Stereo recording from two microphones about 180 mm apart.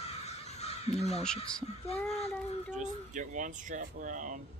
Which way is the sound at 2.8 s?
45° right (ahead or behind).